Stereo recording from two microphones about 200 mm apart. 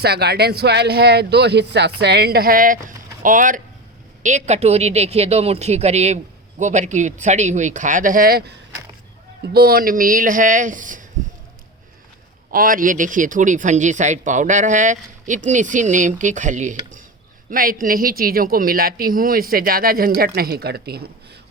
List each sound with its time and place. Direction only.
0.0 s speech: 55° right (ahead or behind)
12.5 s speech: 45° right (ahead or behind)